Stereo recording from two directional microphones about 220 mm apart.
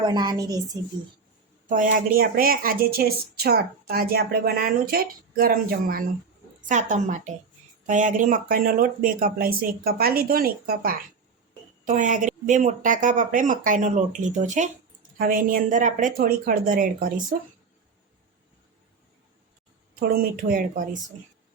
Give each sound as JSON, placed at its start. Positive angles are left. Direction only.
{"t": 0.0, "sound": "a woman's voice", "side_deg": -20}
{"t": 1.7, "sound": "a woman's voice", "side_deg": -35}
{"t": 20.0, "sound": "speech", "side_deg": -40}